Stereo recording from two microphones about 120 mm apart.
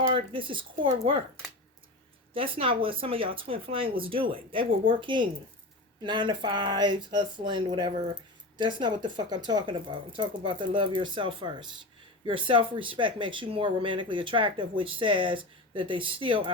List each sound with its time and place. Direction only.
0.1 s speech: 45° right (ahead or behind)
2.3 s speech: 50° right (ahead or behind)